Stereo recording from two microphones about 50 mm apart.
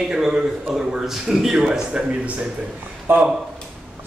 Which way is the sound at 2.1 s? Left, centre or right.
Right.